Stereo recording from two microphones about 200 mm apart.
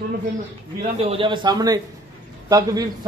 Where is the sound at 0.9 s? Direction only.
25° right (ahead or behind).